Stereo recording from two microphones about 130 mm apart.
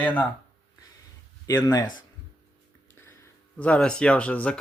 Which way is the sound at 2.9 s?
15° left (ahead or behind).